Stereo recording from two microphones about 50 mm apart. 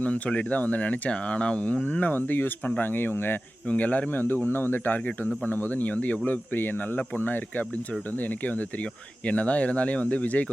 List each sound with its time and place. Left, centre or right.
0.0 s speech: left
3.7 s speech: left
4.2 s speech: left
9.2 s speech: left